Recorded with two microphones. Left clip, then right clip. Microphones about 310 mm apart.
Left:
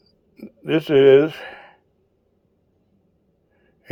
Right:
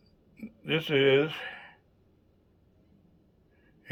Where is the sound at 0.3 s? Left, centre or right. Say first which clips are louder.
Left 9 dB; centre.